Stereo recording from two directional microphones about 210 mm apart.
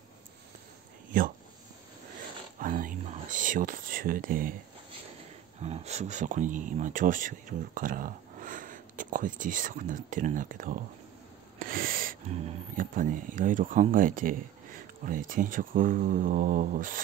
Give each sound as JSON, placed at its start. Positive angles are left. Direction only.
{"t": 1.1, "sound": "speech", "side_deg": -40}
{"t": 2.6, "sound": "whispering", "side_deg": -40}
{"t": 5.6, "sound": "speech", "side_deg": -30}